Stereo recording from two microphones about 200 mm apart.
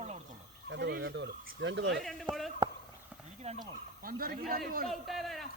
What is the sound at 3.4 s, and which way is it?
Speech, 30° right (ahead or behind).